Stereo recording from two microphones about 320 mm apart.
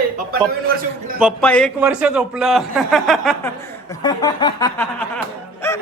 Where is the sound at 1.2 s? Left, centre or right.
Centre.